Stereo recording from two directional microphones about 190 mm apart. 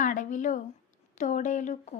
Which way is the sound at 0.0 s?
45° left (ahead or behind).